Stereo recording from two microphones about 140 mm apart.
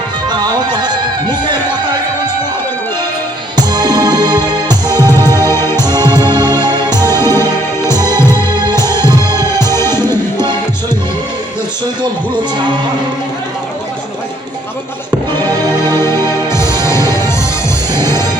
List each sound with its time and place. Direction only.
0.3 s music: 30° right (ahead or behind)
3.7 s music: 30° right (ahead or behind)
5.5 s music: 20° left (ahead or behind)
5.8 s music: 30° right (ahead or behind)
7.2 s music: 20° left (ahead or behind)
8.7 s music: 30° right (ahead or behind)
9.7 s music: 20° left (ahead or behind)
15.3 s music: 25° right (ahead or behind)
16.0 s music: 20° left (ahead or behind)
17.9 s music: 30° right (ahead or behind)